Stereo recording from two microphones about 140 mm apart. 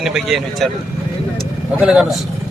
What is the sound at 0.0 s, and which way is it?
Speech, centre (ahead or behind).